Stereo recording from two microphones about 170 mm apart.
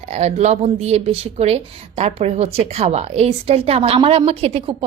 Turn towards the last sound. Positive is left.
turn(degrees=-35)  # may be behind; listen again after turning